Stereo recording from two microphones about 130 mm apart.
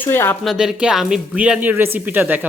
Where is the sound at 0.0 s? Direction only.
15° left (ahead or behind).